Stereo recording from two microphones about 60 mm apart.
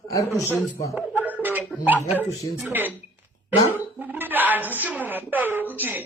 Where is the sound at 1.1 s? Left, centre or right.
Right.